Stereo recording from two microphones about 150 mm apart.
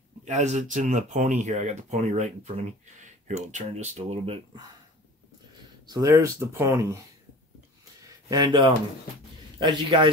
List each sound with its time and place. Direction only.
0.2 s speech: 50° right (ahead or behind)
5.9 s speech: 20° right (ahead or behind)
8.3 s a man's voice: 25° right (ahead or behind)